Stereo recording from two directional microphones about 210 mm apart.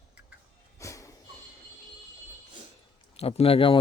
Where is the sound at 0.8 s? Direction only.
15° left (ahead or behind).